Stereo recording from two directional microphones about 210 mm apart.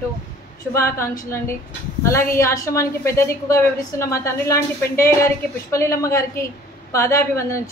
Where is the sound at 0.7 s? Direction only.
10° left (ahead or behind).